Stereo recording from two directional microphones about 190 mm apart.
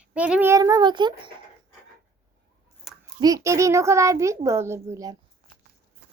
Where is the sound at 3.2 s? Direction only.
15° right (ahead or behind).